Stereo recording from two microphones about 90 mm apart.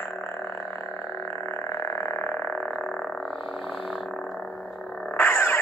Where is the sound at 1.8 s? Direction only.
30° left (ahead or behind); by 3.3 s 5° left (ahead or behind).